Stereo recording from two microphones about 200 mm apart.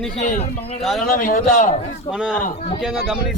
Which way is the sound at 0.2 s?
35° left (ahead or behind).